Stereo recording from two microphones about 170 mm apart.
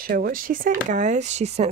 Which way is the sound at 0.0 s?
60° right (ahead or behind).